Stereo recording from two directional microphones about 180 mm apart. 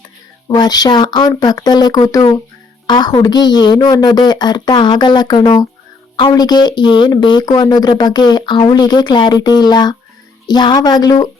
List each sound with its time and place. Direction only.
0.4 s speech: 20° left (ahead or behind)